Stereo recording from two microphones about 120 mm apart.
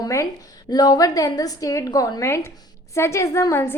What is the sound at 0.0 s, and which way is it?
A woman's voice, 25° left (ahead or behind).